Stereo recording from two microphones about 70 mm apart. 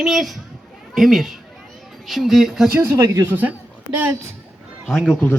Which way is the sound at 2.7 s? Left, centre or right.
Right.